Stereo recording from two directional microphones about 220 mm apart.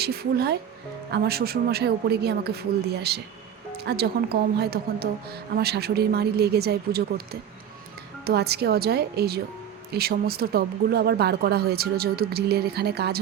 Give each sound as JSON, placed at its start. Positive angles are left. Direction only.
{"t": 0.0, "sound": "a woman's voice", "side_deg": -45}